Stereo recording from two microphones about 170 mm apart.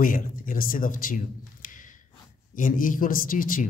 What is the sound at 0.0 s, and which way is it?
Speech, 55° left (ahead or behind).